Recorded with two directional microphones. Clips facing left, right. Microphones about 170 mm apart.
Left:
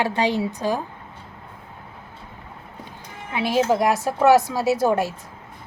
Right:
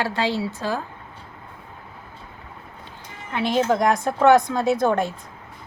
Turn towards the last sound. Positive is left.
turn(degrees=5)  # may be behind; listen again after turning